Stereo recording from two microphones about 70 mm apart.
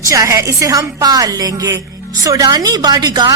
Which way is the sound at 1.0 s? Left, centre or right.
Right.